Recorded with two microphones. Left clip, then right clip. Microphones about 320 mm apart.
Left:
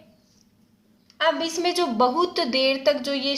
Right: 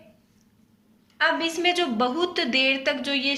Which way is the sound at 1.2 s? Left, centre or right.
Centre.